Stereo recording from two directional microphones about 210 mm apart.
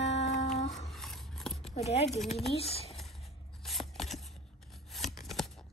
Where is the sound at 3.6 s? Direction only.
Centre (ahead or behind).